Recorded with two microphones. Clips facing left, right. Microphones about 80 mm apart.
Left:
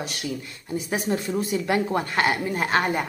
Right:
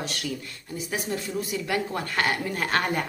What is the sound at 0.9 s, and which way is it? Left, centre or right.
Speech, left.